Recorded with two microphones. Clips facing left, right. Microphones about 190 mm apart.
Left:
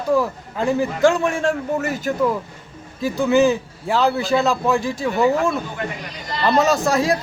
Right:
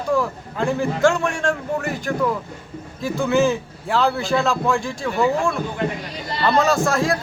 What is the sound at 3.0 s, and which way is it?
A man's voice, centre (ahead or behind).